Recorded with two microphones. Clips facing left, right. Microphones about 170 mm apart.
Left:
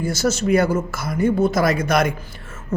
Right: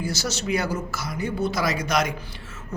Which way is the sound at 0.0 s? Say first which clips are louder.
Left 8 dB; 50° left (ahead or behind).